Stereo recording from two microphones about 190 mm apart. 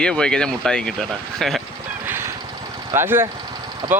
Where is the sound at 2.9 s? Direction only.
10° right (ahead or behind).